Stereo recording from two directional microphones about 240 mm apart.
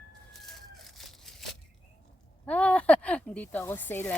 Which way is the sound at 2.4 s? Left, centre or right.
Centre.